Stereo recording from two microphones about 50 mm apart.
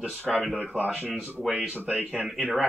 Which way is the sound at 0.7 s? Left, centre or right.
Right.